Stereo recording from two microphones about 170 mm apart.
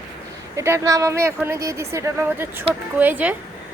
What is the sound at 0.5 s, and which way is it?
A woman's voice, 15° right (ahead or behind).